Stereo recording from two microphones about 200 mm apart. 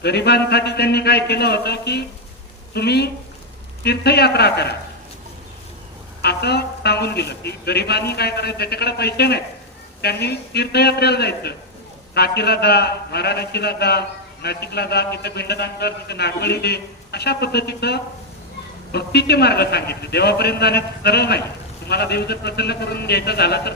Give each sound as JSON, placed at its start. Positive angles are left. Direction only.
{"t": 0.0, "sound": "a woman's voice", "side_deg": 55}
{"t": 6.2, "sound": "a woman's voice", "side_deg": 55}